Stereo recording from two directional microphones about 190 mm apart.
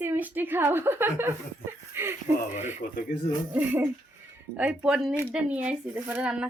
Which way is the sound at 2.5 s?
40° left (ahead or behind).